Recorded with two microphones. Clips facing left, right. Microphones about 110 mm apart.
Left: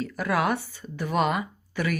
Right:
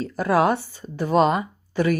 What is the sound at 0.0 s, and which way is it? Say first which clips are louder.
A woman's voice: right 6 dB; 30° right (ahead or behind).